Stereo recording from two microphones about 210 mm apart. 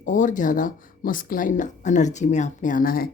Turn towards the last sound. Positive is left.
turn(degrees=45)  # may be behind; listen again after turning